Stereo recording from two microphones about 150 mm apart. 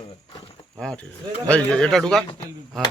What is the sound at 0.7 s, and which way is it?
Speech, 5° left (ahead or behind).